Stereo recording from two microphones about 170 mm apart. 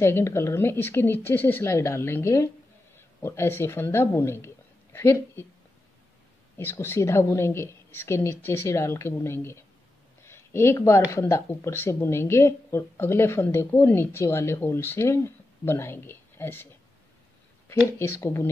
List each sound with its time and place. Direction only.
0.0 s speech: 15° left (ahead or behind)
6.5 s speech: 15° left (ahead or behind)
10.2 s a sound: 15° left (ahead or behind)
11.1 s speech: 15° left (ahead or behind)
17.6 s speech: 15° left (ahead or behind)